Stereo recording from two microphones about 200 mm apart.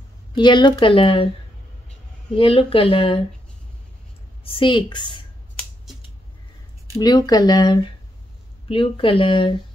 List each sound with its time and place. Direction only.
0.3 s speech: 25° left (ahead or behind)
2.3 s speech: 25° left (ahead or behind)
4.5 s speech: 25° left (ahead or behind)
7.0 s speech: 20° left (ahead or behind)